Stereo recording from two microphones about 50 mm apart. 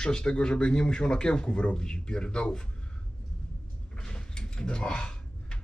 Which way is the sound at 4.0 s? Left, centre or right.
Centre.